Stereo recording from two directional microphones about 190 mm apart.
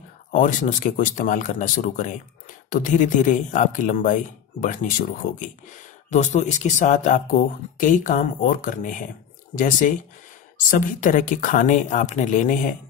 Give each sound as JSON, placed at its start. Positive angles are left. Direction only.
{"t": 0.3, "sound": "speech", "side_deg": 40}